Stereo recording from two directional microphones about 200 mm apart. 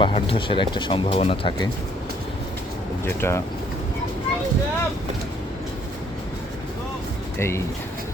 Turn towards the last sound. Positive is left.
turn(degrees=15)  # may be behind; listen again after turning